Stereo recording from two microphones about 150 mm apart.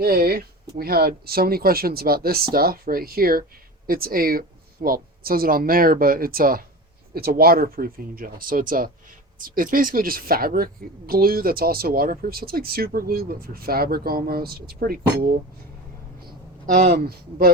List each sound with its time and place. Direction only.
0.0 s a woman's voice: 85° right
7.1 s a woman's voice: 90° right
16.2 s speech: 60° right (ahead or behind); by 17.5 s 85° right